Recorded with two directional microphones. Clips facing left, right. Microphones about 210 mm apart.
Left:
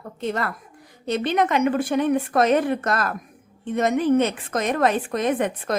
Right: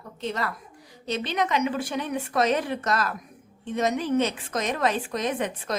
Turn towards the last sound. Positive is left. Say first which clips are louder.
# left 5 dB
turn(degrees=55)  # may be behind; listen again after turning